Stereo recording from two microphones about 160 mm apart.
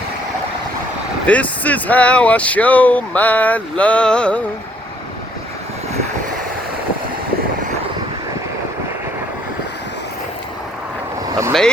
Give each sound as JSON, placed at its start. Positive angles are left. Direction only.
{"t": 1.3, "sound": "speech", "side_deg": 10}
{"t": 11.3, "sound": "speech", "side_deg": -20}